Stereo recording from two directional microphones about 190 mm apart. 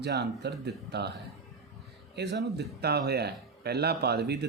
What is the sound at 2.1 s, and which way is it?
Speech, 60° right (ahead or behind).